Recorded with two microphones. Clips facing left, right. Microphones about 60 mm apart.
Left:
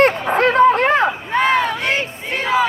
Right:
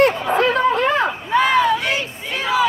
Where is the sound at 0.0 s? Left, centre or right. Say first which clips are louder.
Left 1 dB; left.